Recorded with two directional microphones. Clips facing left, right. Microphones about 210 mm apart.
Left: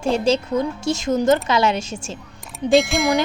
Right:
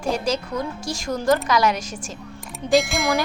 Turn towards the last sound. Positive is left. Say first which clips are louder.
# left 3 dB
turn(degrees=0)  # may be behind; listen again after turning